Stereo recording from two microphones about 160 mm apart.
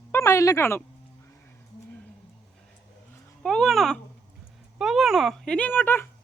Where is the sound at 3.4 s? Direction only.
Centre (ahead or behind).